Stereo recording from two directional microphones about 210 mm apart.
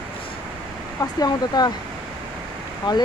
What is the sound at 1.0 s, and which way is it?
Speech, 20° left (ahead or behind).